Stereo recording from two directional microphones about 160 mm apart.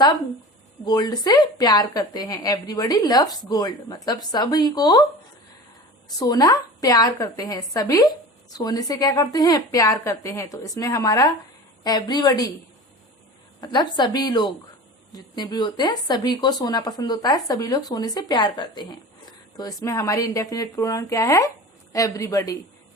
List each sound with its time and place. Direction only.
0.9 s a woman's voice: 25° left (ahead or behind)
6.1 s a woman's voice: 25° left (ahead or behind)
13.6 s a woman's voice: 25° left (ahead or behind)